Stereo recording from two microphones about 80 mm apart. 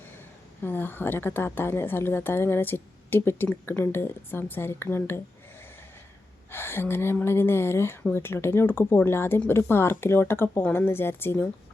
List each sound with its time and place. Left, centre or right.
0.6 s a woman's voice: left
6.5 s a woman's voice: left